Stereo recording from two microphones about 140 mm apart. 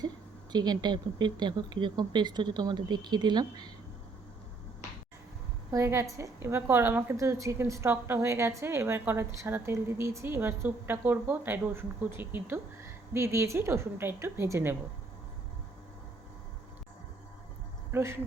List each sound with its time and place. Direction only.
0.5 s speech: 30° right (ahead or behind)
5.7 s a woman's voice: 20° right (ahead or behind)
17.9 s speech: 20° right (ahead or behind)